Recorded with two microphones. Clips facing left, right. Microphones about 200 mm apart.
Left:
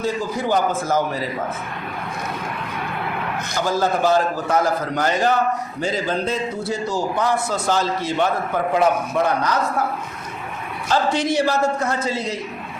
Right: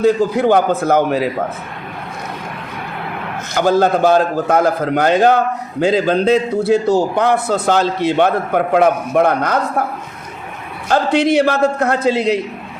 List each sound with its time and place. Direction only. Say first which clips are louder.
0.0 s a man's voice: right 10 dB; 65° right (ahead or behind)
3.5 s a man's voice: right 8 dB; 60° right (ahead or behind)
10.8 s a man's voice: right 6 dB; 60° right (ahead or behind)